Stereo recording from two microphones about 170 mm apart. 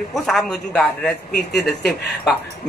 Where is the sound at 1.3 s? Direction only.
70° left (ahead or behind).